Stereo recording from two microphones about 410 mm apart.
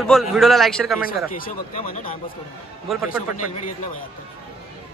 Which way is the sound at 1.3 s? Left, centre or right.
Left.